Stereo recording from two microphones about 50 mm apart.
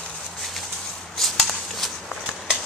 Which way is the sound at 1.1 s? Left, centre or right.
Centre.